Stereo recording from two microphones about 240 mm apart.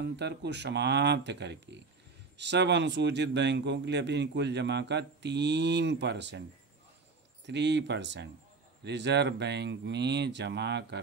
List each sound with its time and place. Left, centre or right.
0.0 s speech: right
7.4 s speech: right